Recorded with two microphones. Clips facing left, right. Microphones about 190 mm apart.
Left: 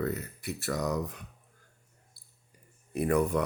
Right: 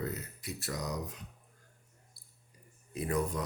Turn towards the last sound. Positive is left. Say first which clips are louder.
# left 6 dB
turn(degrees=65)  # may be behind; listen again after turning